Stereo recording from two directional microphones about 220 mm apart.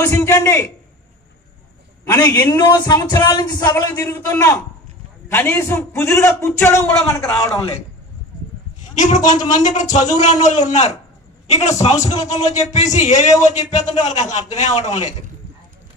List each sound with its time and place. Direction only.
0.0 s speech: 15° left (ahead or behind)
2.0 s speech: 15° left (ahead or behind)
8.9 s a man's voice: 35° left (ahead or behind)